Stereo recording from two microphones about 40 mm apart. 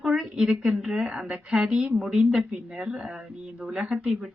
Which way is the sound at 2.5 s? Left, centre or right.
Right.